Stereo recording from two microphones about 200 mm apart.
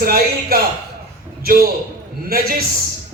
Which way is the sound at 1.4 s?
45° right (ahead or behind).